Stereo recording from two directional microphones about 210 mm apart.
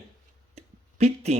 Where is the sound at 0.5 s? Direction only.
30° right (ahead or behind).